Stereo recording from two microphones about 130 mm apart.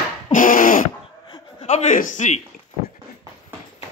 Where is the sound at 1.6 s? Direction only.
60° left (ahead or behind).